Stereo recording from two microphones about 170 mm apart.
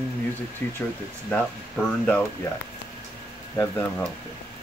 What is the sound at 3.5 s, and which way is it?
Speech, 15° left (ahead or behind).